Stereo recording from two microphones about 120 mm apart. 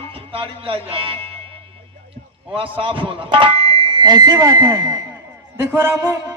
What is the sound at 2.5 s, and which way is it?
A man's voice, 50° right (ahead or behind).